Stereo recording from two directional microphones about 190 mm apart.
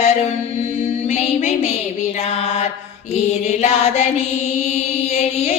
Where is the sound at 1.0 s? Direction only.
35° left (ahead or behind).